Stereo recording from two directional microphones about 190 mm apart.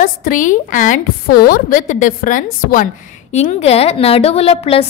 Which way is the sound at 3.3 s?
35° left (ahead or behind).